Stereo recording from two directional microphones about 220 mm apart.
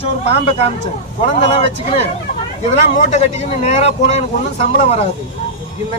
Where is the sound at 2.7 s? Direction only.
30° left (ahead or behind).